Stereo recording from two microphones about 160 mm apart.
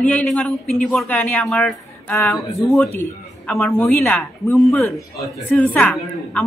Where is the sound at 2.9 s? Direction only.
15° left (ahead or behind).